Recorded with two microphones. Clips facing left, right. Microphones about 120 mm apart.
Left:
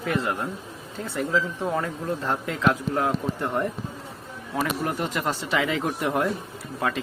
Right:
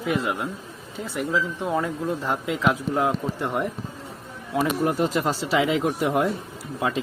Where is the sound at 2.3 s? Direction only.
15° right (ahead or behind).